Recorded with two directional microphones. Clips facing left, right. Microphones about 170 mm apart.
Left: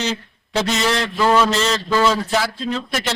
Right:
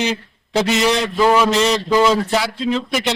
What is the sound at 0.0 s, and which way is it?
Mantra, 15° right (ahead or behind).